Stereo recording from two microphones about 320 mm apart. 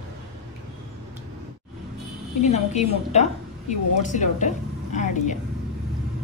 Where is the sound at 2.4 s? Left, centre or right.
Left.